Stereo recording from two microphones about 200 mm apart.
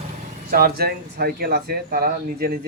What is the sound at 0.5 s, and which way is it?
Speech, 50° right (ahead or behind).